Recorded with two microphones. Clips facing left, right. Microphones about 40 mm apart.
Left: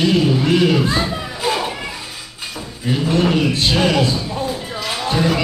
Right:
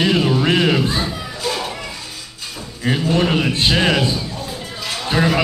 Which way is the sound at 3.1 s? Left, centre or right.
Centre.